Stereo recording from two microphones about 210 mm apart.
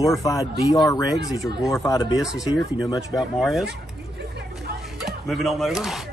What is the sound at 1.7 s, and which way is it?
Speech, 15° left (ahead or behind).